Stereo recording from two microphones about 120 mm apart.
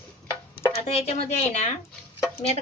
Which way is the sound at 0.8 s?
65° left (ahead or behind).